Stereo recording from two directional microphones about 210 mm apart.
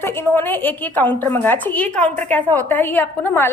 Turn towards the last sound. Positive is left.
turn(degrees=10)  # may be behind; listen again after turning